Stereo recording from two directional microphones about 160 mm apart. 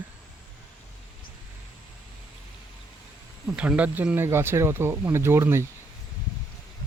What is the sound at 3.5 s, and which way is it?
Speech, 5° right (ahead or behind).